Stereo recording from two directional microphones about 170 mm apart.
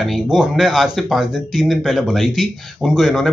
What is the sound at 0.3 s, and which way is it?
Speech, centre (ahead or behind).